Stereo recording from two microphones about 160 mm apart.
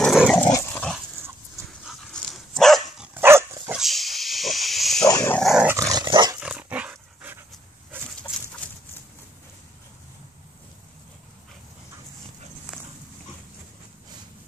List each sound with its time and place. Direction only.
0.0 s dog: centre (ahead or behind)
0.4 s dog: 15° left (ahead or behind)
1.9 s dog: centre (ahead or behind)
3.2 s dog: 15° right (ahead or behind)
3.7 s a sound: centre (ahead or behind)
5.0 s dog: 15° left (ahead or behind)
5.4 s dog: centre (ahead or behind)
5.7 s dog: 20° right (ahead or behind)
6.4 s dog: 10° right (ahead or behind)
12.7 s walk: 5° right (ahead or behind)